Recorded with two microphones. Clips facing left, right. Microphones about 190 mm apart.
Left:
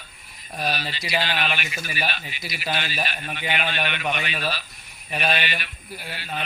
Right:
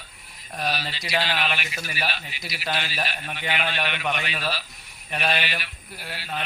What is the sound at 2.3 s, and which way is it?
Speech, 55° left (ahead or behind).